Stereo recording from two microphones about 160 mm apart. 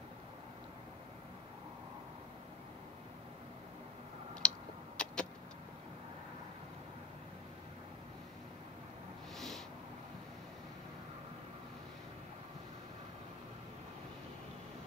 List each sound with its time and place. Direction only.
4.4 s tick-tock: 5° left (ahead or behind)